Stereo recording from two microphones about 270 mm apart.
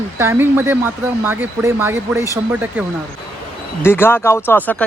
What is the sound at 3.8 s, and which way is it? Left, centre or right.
Speech, centre.